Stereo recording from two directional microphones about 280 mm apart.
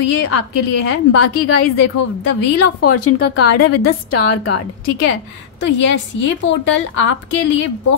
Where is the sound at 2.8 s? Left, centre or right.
Left.